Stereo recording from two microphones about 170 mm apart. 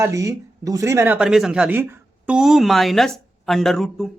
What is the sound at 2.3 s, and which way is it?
Speech, centre (ahead or behind).